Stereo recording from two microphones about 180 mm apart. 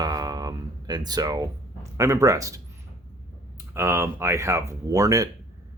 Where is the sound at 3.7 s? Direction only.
15° right (ahead or behind).